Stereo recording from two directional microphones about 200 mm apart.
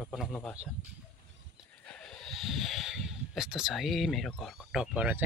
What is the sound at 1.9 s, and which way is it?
Speech, centre (ahead or behind).